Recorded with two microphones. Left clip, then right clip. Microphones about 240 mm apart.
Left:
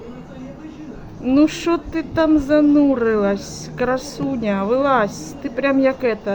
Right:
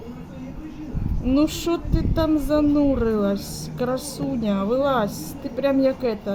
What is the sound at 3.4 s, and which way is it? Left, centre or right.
Speech, left.